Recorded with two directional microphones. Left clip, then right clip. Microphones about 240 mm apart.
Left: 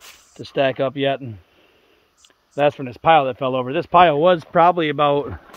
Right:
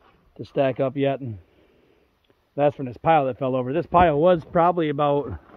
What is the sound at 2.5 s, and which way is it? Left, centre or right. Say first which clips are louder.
Speech: left 3 dB; centre.